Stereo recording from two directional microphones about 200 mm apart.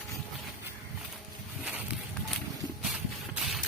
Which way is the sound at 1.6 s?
5° right (ahead or behind).